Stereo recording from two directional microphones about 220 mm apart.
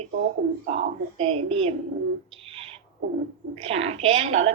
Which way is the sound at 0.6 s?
30° right (ahead or behind).